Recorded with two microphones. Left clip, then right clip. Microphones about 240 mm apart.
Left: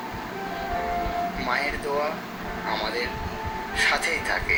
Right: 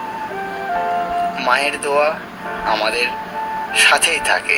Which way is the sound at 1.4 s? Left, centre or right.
Right.